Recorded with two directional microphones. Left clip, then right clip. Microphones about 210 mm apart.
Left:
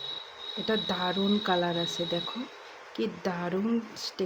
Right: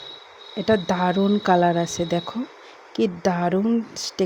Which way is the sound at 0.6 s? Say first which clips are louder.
Right 9 dB; 35° right (ahead or behind).